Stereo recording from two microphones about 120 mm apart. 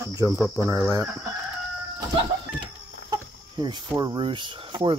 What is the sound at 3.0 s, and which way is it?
Speech, 40° right (ahead or behind).